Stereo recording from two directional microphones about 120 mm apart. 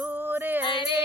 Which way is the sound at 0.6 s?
45° left (ahead or behind).